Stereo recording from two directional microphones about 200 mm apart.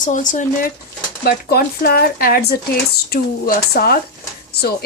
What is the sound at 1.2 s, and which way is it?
Speech, 50° left (ahead or behind).